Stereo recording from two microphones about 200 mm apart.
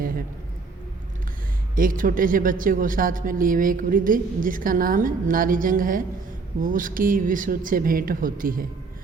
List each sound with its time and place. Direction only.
1.7 s speech: 45° right (ahead or behind)